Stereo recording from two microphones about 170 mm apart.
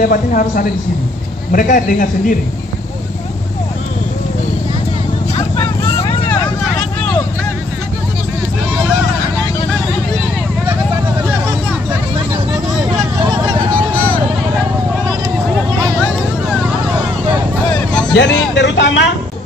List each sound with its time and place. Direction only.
0.0 s a man's voice: 55° left (ahead or behind)
13.7 s vehicle: 10° left (ahead or behind)
18.1 s speech: 90° left